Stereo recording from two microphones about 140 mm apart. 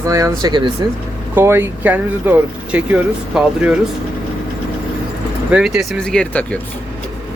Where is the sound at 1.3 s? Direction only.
15° right (ahead or behind).